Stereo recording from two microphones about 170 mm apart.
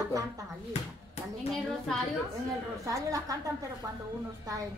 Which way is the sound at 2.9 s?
20° right (ahead or behind).